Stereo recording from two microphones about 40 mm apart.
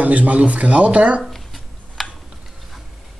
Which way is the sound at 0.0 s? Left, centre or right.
Right.